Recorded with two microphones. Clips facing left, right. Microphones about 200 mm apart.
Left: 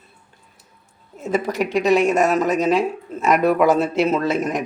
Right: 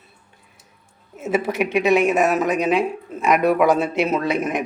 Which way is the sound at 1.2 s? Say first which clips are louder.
Even; 5° right (ahead or behind).